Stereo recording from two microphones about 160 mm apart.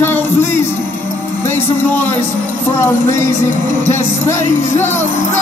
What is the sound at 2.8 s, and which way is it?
Music, 15° left (ahead or behind).